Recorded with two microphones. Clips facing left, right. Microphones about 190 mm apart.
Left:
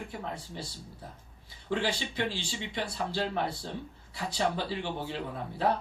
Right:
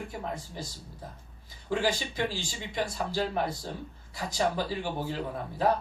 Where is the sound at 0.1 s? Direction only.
40° right (ahead or behind).